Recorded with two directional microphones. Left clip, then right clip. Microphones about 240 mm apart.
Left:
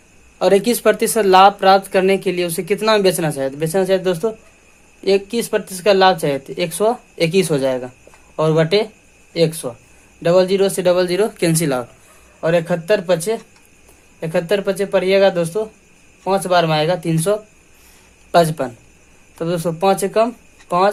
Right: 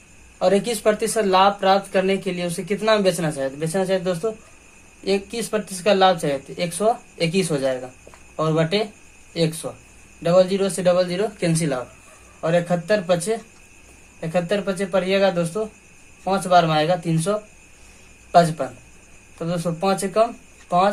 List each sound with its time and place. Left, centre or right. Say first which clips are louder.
0.3 s speech: left 5 dB; left